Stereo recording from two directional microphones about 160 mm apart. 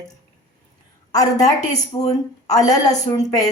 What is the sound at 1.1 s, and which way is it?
A woman's voice, 20° left (ahead or behind).